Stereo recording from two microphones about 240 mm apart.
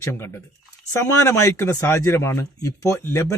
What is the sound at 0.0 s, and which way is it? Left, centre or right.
A man's voice, centre.